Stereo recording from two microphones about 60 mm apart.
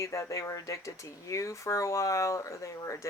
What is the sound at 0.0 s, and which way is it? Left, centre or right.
Speech, left.